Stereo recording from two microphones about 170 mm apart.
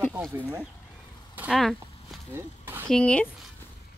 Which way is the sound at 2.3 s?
15° right (ahead or behind).